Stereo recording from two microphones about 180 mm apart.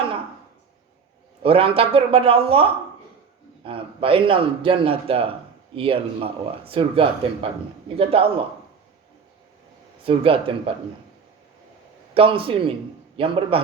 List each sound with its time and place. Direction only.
1.4 s a man's voice: 30° right (ahead or behind)
10.0 s a man's voice: 30° right (ahead or behind)
12.1 s a man's voice: 30° right (ahead or behind)